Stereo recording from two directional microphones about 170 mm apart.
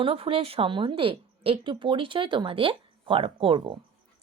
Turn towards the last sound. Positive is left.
turn(degrees=-30)  # may be behind; listen again after turning